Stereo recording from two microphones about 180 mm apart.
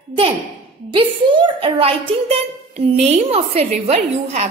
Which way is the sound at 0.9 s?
30° right (ahead or behind).